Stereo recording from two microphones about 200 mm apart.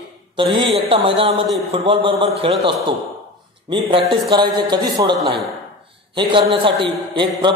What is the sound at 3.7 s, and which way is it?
A man's voice, 25° right (ahead or behind).